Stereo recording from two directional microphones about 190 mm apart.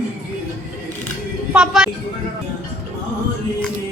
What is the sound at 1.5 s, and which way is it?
Speech, 5° right (ahead or behind).